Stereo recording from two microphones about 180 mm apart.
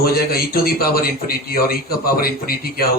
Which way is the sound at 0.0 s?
55° left (ahead or behind).